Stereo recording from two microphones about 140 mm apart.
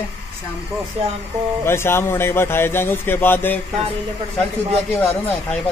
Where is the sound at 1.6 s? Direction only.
15° left (ahead or behind).